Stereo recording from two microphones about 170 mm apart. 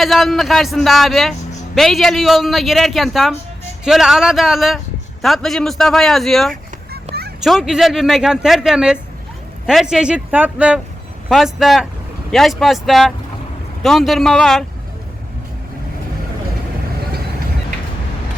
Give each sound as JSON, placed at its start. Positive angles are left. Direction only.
{"t": 0.0, "sound": "a man's voice", "side_deg": 0}
{"t": 7.1, "sound": "children playing", "side_deg": -40}
{"t": 7.4, "sound": "a man's voice", "side_deg": 0}